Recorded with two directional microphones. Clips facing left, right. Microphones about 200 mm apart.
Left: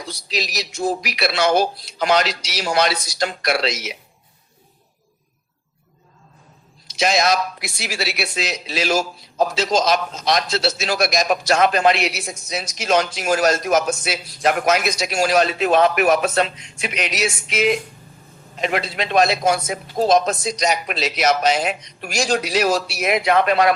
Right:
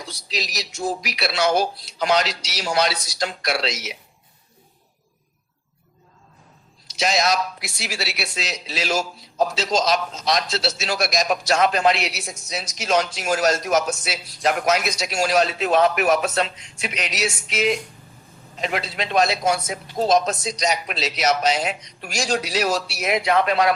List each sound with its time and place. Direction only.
0.3 s speech: 55° left (ahead or behind)
6.9 s speech: 55° left (ahead or behind)